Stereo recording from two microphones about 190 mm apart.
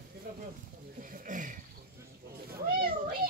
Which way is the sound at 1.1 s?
40° right (ahead or behind).